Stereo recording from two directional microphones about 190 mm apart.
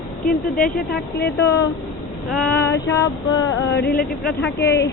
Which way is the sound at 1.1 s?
65° left (ahead or behind).